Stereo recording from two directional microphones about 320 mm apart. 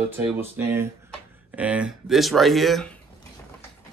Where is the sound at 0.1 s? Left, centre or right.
Centre.